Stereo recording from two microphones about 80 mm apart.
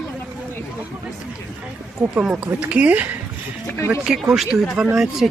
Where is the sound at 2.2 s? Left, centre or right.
Centre.